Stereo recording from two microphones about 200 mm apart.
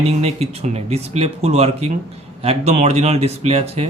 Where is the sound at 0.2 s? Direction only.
30° right (ahead or behind).